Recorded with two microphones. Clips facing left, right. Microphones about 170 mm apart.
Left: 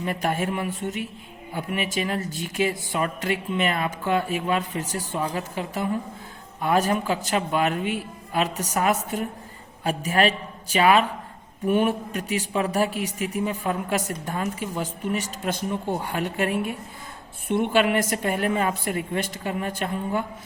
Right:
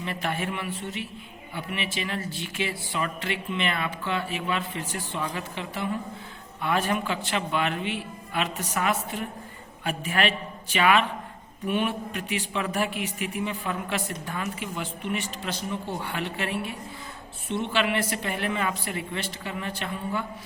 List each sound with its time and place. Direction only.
0.0 s a man's voice: 45° left (ahead or behind)